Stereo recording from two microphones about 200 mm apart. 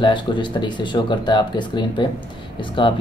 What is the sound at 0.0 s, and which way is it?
Speech, 25° left (ahead or behind).